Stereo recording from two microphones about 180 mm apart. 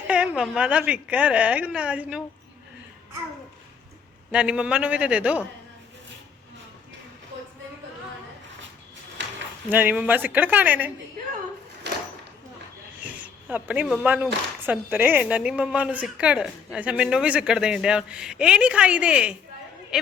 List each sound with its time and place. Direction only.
0.1 s a woman's voice: 5° right (ahead or behind)
4.3 s a woman's voice: 5° right (ahead or behind)
9.6 s a woman's voice: 10° right (ahead or behind)
11.9 s a sound: 70° right (ahead or behind)
13.0 s a sound: 10° right (ahead or behind)
14.7 s a woman's voice: 10° right (ahead or behind)